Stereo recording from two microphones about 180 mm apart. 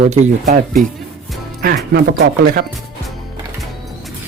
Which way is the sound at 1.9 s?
65° right (ahead or behind).